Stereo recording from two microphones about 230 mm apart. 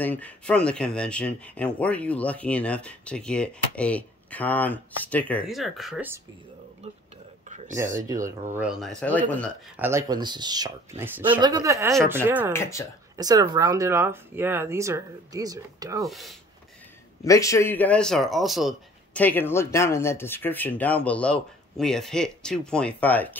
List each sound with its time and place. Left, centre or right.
0.0 s speech: centre
7.4 s a sound: right
8.5 s speech: centre
9.8 s speech: centre
12.5 s a man's voice: centre
13.1 s speech: centre
16.1 s speech: centre
17.2 s a man's voice: centre